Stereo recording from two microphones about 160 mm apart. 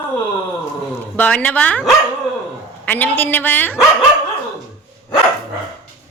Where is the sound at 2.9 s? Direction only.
10° left (ahead or behind).